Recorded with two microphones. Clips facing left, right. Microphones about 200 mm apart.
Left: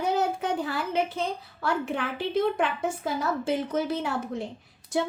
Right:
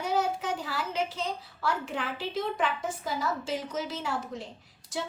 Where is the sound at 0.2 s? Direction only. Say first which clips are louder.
Left 3 dB; 55° left (ahead or behind).